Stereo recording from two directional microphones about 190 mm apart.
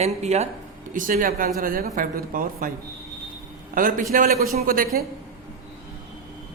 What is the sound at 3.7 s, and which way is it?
Speech, 45° right (ahead or behind).